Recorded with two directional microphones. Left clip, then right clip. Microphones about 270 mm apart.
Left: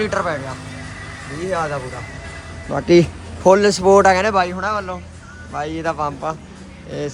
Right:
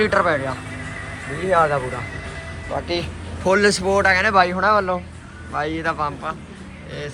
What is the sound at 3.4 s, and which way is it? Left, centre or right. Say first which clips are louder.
Speech: left 4 dB; centre.